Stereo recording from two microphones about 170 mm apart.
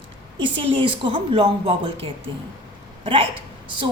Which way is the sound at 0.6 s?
30° right (ahead or behind).